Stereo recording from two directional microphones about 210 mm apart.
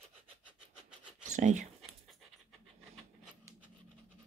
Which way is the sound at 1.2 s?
35° right (ahead or behind).